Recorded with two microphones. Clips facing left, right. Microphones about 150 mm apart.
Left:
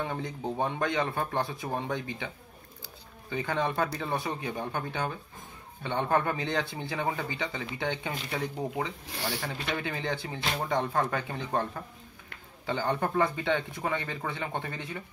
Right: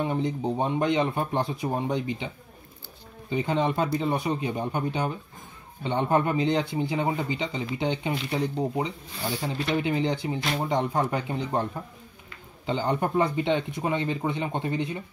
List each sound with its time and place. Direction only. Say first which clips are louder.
0.0 s speech: right 7 dB; 20° right (ahead or behind)